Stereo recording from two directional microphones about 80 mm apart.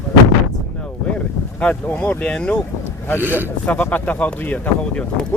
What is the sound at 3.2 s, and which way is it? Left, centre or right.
Speech, right.